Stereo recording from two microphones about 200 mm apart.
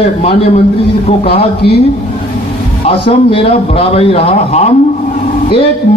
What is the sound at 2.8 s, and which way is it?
A man's voice, 25° left (ahead or behind).